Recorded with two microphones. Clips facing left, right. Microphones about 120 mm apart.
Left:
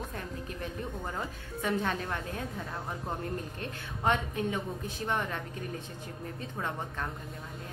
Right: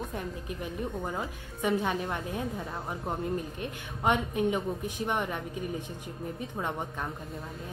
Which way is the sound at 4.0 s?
15° right (ahead or behind).